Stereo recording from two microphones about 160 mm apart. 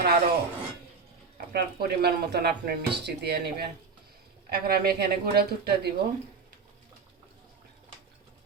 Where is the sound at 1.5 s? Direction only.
90° right.